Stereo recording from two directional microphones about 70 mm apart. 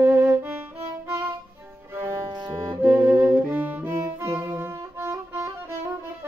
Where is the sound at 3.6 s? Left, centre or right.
Right.